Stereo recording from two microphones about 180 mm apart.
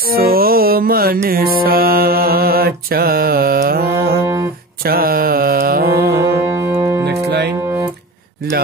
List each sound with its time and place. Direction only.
0.1 s music: 55° right (ahead or behind)
4.8 s mantra: 55° right (ahead or behind)
6.1 s music: 15° right (ahead or behind)
7.1 s music: 65° right (ahead or behind)